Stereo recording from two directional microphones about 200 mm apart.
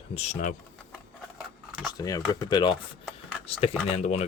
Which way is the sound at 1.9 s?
20° left (ahead or behind).